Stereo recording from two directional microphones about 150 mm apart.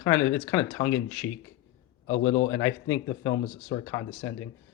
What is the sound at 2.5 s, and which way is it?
Speech, 20° left (ahead or behind).